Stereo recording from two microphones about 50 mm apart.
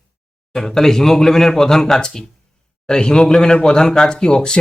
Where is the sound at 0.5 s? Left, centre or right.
Centre.